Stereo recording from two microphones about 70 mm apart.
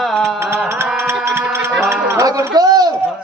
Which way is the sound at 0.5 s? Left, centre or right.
Right.